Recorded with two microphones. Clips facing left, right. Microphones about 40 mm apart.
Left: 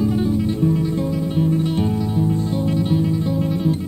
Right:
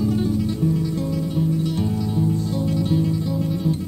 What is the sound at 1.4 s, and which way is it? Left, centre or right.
Music, left.